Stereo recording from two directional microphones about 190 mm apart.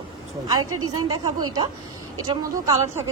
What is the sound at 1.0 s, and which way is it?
A woman's voice, 20° right (ahead or behind).